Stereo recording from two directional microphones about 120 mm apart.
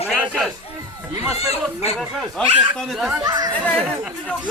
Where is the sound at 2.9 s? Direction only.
Centre (ahead or behind).